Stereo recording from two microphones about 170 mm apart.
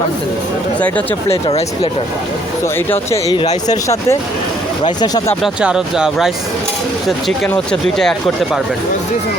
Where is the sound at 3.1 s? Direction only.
25° left (ahead or behind).